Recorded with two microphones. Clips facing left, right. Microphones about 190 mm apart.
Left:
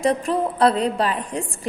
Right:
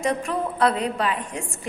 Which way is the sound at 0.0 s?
35° left (ahead or behind).